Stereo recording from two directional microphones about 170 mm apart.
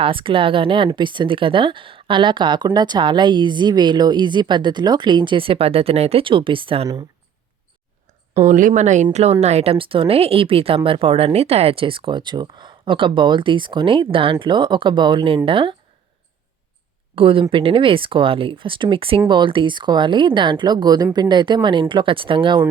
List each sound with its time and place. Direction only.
0.0 s speech: 30° right (ahead or behind)
8.4 s speech: 45° right (ahead or behind); by 15.7 s 30° right (ahead or behind)
17.2 s speech: 30° right (ahead or behind)